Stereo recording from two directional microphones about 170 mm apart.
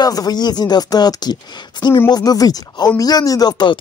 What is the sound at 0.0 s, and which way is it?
Speech, 20° left (ahead or behind).